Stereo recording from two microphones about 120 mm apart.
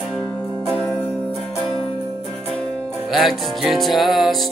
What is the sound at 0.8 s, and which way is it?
Music, centre (ahead or behind).